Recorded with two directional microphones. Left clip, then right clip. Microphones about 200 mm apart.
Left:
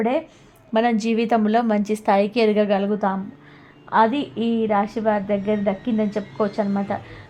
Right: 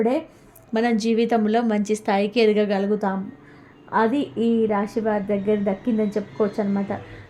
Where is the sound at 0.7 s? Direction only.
25° left (ahead or behind).